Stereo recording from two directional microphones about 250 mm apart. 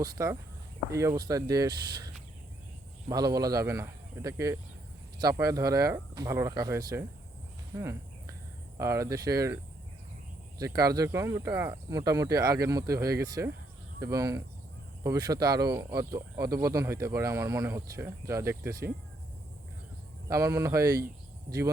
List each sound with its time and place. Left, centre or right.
0.0 s speech: centre
3.1 s speech: centre
10.6 s speech: centre
20.2 s speech: centre